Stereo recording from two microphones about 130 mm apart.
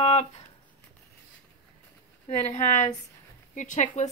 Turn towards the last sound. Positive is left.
turn(degrees=70)  # may be behind; listen again after turning